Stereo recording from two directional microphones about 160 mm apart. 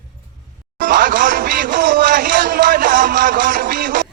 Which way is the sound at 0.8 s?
60° right (ahead or behind).